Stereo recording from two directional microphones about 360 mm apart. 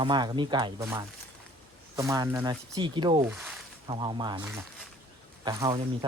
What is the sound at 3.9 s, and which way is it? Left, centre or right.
Speech, centre.